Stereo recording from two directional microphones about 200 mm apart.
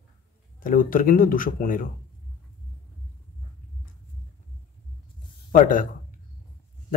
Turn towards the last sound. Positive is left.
turn(degrees=40)  # may be behind; listen again after turning